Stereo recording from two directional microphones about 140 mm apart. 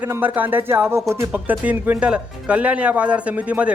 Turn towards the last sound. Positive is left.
turn(degrees=-10)  # may be behind; listen again after turning